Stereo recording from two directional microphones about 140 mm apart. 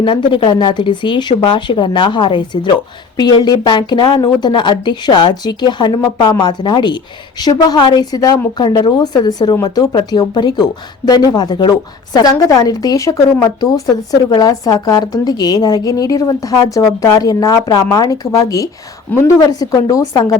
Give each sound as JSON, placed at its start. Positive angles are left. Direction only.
{"t": 0.0, "sound": "a woman's voice", "side_deg": 35}